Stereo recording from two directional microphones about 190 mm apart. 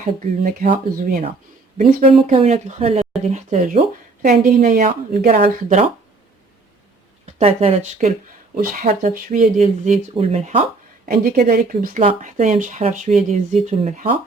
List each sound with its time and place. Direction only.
0.0 s a woman's voice: 45° right (ahead or behind)
1.8 s a woman's voice: 45° right (ahead or behind)
2.1 s a woman's voice: 30° right (ahead or behind)
7.3 s speech: 35° right (ahead or behind)
11.1 s speech: 50° right (ahead or behind)